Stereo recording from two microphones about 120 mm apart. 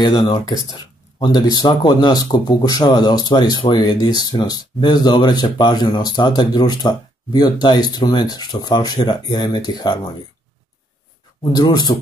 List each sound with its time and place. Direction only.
0.0 s speech: 40° left (ahead or behind)
11.5 s speech: 35° left (ahead or behind)